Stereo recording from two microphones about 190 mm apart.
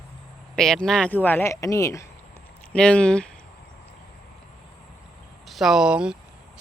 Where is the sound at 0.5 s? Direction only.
5° left (ahead or behind).